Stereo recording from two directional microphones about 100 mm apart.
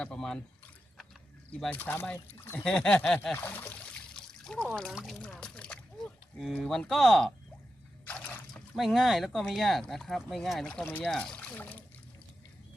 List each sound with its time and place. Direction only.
0.0 s speech: 5° left (ahead or behind)
1.5 s speech: 5° left (ahead or behind)
1.7 s speech: 20° left (ahead or behind)
2.6 s speech: 5° left (ahead or behind)
3.3 s speech: 20° left (ahead or behind)
4.1 s trickle: 5° left (ahead or behind)
5.2 s a sound: 10° left (ahead or behind)
6.6 s speech: 5° left (ahead or behind)
8.0 s a sound: 15° left (ahead or behind)
8.7 s speech: centre (ahead or behind); by 11.8 s 15° left (ahead or behind)